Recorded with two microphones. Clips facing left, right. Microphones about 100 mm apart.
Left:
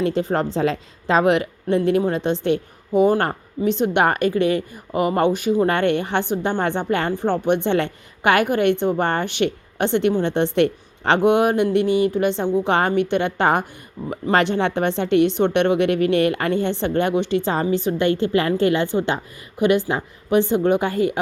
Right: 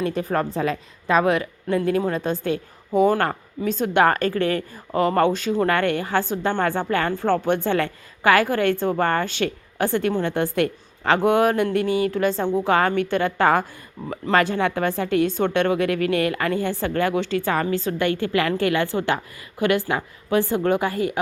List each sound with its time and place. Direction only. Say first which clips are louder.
0.0 s a woman's voice: left 3 dB; 30° left (ahead or behind)
11.5 s a sound: left 3 dB; 45° right (ahead or behind)
12.0 s speech: left 2 dB; 20° left (ahead or behind)